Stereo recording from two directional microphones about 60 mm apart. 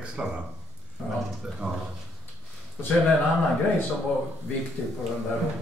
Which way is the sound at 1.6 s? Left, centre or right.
Centre.